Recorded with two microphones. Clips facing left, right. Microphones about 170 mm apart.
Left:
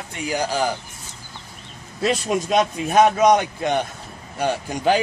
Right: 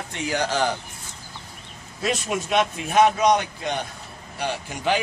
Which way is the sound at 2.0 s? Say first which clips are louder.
Left 4 dB; 35° left (ahead or behind).